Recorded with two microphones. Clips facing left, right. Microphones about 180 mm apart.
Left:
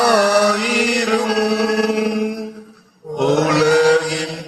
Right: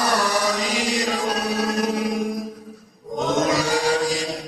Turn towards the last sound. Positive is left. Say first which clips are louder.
# left 7 dB
turn(degrees=70)  # may be behind; listen again after turning